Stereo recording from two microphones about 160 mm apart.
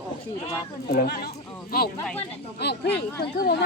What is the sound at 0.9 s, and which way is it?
Speech, 75° left (ahead or behind).